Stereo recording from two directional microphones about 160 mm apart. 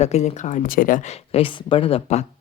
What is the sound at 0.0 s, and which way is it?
Speech, 45° left (ahead or behind).